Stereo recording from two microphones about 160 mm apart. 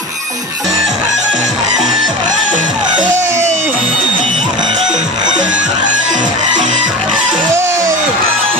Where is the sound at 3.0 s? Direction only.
15° right (ahead or behind).